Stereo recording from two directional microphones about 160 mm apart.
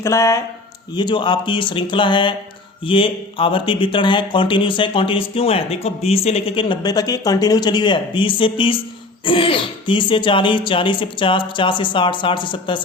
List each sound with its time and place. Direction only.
0.0 s speech: 20° left (ahead or behind)